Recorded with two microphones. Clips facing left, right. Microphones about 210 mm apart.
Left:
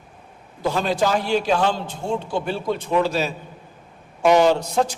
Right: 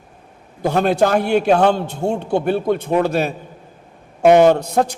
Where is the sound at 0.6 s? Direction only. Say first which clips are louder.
Right 5 dB; 60° right (ahead or behind).